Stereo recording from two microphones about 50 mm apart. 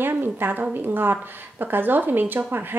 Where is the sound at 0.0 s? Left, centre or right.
Right.